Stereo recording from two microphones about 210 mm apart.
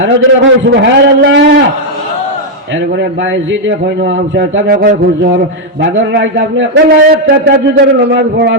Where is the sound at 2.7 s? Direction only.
60° right (ahead or behind).